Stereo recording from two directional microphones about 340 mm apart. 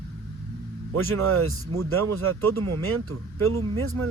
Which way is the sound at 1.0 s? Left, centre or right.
Right.